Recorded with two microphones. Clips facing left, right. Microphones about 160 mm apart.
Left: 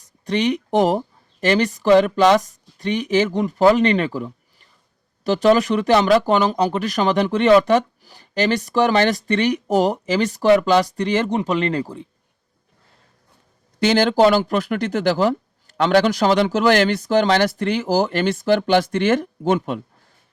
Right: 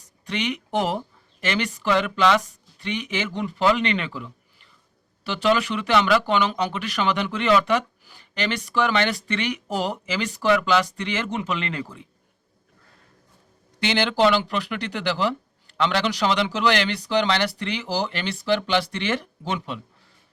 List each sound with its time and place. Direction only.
0.3 s speech: 35° left (ahead or behind)
13.7 s speech: 40° left (ahead or behind)